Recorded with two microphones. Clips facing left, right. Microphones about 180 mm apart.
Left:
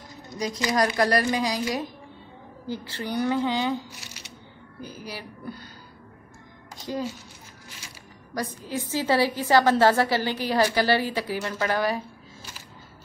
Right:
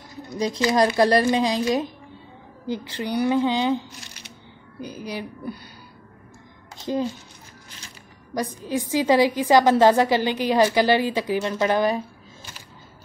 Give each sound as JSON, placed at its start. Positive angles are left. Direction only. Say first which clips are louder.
{"t": 0.7, "sound": "a woman's voice", "louder": "right 4 dB", "side_deg": -25}
{"t": 4.8, "sound": "a woman's voice", "louder": "right 6 dB", "side_deg": -15}
{"t": 8.4, "sound": "a woman's voice", "louder": "right 4 dB", "side_deg": -15}